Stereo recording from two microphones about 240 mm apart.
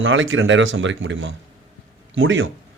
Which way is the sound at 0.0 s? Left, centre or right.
Right.